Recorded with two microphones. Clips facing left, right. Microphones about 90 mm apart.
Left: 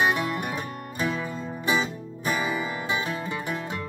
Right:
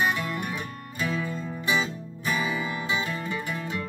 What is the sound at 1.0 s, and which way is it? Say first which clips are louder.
Music: left 1 dB; 25° left (ahead or behind).